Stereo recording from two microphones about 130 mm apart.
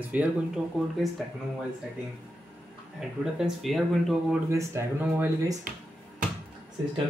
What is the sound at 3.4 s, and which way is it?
Speech, centre (ahead or behind).